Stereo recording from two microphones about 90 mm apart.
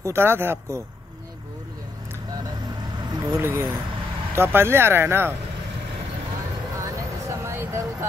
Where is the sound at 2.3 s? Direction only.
45° right (ahead or behind).